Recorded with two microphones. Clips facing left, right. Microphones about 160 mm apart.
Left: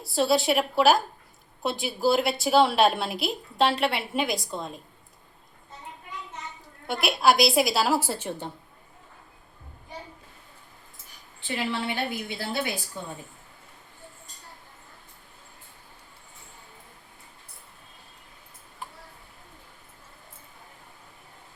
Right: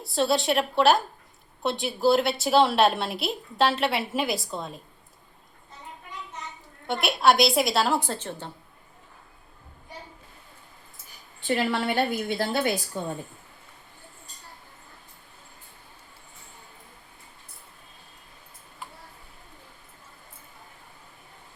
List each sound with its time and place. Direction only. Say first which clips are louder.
0.0 s a woman's voice: left 1 dB; centre (ahead or behind)
6.8 s a woman's voice: right 1 dB; centre (ahead or behind)
11.4 s a woman's voice: right 4 dB; 50° right (ahead or behind)